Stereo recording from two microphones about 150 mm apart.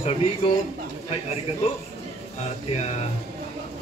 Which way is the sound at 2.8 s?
45° left (ahead or behind).